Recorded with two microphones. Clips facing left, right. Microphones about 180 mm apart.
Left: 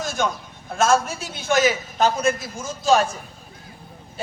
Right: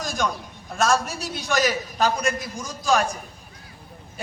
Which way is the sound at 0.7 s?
Centre (ahead or behind).